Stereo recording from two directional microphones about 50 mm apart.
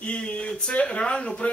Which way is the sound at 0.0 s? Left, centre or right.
Left.